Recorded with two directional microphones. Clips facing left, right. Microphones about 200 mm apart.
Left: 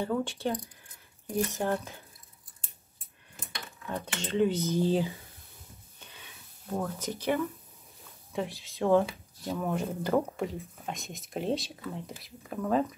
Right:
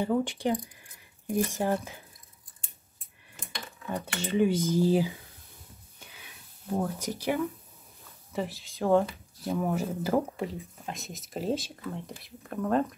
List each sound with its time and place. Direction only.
0.0 s cutlery: 15° right (ahead or behind)
3.9 s cutlery: 10° right (ahead or behind)
5.9 s a sound: 10° right (ahead or behind)
7.0 s cutlery: 10° right (ahead or behind)
8.3 s speech: centre (ahead or behind)